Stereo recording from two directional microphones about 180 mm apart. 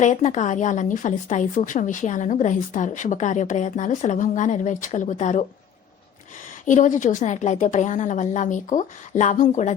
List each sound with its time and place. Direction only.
0.0 s a woman's voice: 40° left (ahead or behind)
6.7 s a woman's voice: 45° left (ahead or behind)